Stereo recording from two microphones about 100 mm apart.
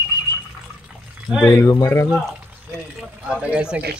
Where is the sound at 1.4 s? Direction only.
30° left (ahead or behind).